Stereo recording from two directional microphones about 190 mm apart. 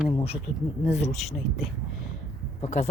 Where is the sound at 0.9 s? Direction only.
35° left (ahead or behind).